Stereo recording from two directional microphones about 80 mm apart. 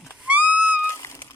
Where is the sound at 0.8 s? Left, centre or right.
Left.